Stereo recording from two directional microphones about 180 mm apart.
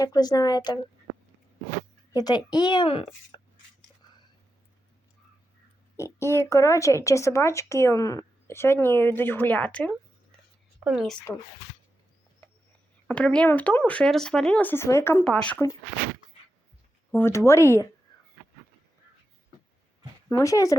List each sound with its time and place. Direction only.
0.0 s a woman's voice: 20° left (ahead or behind)
2.1 s a woman's voice: 20° left (ahead or behind)
3.3 s a sound: 25° left (ahead or behind)
6.0 s speech: 15° left (ahead or behind); by 11.2 s centre (ahead or behind)
13.1 s speech: 5° left (ahead or behind)
17.2 s speech: 15° left (ahead or behind)
20.3 s speech: 20° left (ahead or behind)